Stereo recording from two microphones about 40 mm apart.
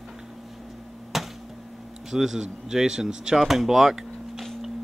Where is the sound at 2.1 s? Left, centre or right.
Centre.